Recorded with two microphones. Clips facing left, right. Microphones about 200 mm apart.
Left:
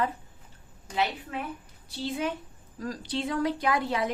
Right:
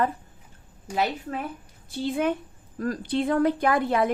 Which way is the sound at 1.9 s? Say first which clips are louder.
Right 6 dB; 55° right (ahead or behind).